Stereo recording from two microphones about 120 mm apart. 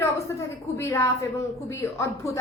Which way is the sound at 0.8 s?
25° left (ahead or behind).